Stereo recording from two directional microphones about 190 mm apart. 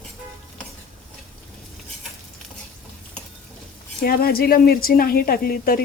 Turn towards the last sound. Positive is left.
turn(degrees=50)  # may be behind; listen again after turning